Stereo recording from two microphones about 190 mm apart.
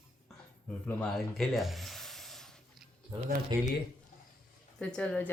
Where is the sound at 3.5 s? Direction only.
20° right (ahead or behind).